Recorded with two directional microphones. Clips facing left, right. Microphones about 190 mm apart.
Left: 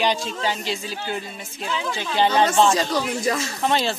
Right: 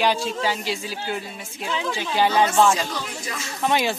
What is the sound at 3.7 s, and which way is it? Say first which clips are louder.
Speech: right 1 dB; 15° right (ahead or behind).